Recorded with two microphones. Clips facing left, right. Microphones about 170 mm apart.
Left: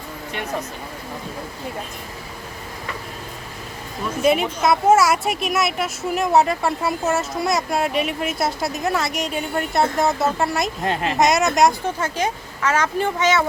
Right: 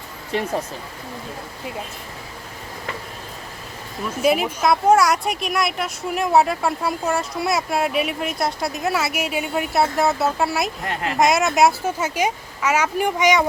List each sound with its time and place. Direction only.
0.3 s speech: 35° right (ahead or behind)
4.2 s a woman's voice: 5° right (ahead or behind)
10.8 s speech: 25° left (ahead or behind)
11.2 s speech: centre (ahead or behind)